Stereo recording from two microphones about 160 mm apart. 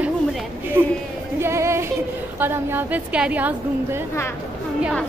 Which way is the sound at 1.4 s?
15° right (ahead or behind).